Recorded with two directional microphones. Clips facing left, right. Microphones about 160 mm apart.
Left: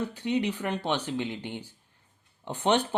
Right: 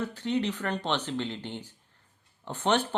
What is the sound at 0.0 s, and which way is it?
Speech, 15° left (ahead or behind).